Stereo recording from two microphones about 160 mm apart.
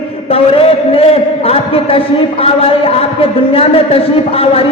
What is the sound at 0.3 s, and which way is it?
A man's voice, 35° left (ahead or behind).